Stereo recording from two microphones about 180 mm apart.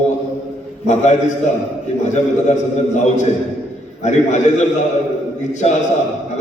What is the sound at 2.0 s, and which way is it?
A man's voice, 40° left (ahead or behind).